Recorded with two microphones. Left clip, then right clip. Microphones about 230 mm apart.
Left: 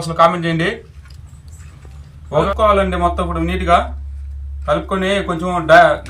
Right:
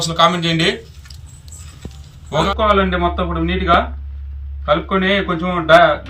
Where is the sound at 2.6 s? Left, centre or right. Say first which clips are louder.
Left 1 dB; left.